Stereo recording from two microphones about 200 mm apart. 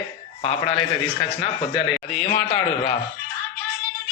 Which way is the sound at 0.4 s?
30° left (ahead or behind).